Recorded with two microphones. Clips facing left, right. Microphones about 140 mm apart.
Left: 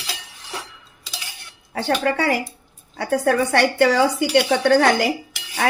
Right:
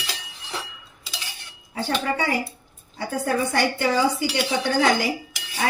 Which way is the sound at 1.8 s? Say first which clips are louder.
Left 4 dB; 75° left (ahead or behind).